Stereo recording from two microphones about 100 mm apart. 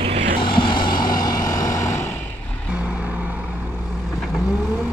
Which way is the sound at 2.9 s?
15° right (ahead or behind).